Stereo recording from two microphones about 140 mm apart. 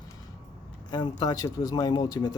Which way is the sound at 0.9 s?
30° left (ahead or behind).